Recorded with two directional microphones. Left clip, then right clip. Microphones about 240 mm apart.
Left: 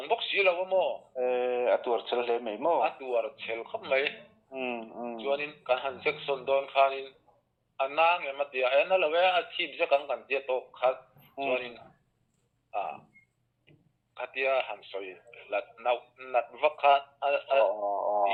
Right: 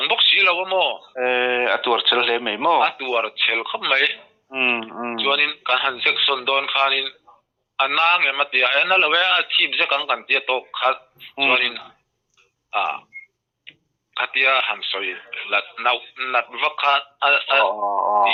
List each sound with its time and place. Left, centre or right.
0.0 s radio: centre
0.5 s a man's voice: right
1.1 s a man's voice: centre
14.2 s a man's voice: centre
17.7 s speech: right